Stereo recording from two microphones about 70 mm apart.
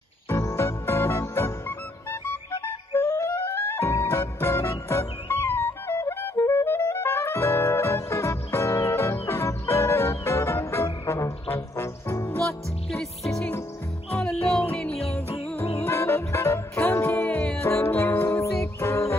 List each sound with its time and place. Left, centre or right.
0.3 s music: left
3.9 s music: left
4.2 s music: left
12.4 s music: centre
15.5 s music: left
17.3 s music: left
17.6 s music: left